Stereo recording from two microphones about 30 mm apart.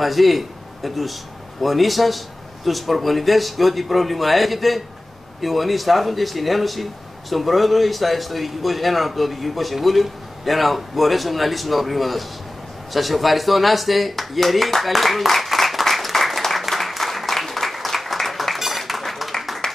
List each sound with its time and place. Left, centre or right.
0.0 s a man's voice: centre
15.0 s applause: centre
19.6 s clapping: left